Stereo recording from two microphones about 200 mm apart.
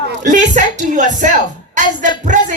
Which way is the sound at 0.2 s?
40° right (ahead or behind).